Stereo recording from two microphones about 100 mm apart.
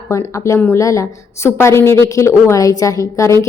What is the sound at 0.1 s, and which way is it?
A woman's voice, 30° left (ahead or behind).